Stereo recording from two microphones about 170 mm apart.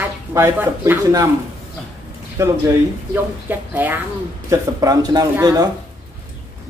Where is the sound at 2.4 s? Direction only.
20° right (ahead or behind).